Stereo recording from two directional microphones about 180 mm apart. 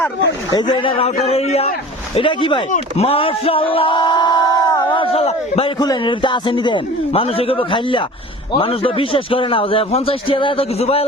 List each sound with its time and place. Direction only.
0.6 s a man's voice: 25° left (ahead or behind)